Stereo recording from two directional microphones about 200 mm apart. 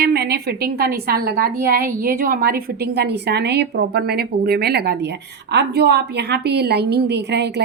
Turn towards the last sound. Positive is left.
turn(degrees=-55)  # may be behind; listen again after turning